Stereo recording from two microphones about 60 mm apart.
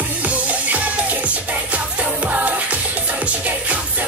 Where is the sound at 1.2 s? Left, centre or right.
Right.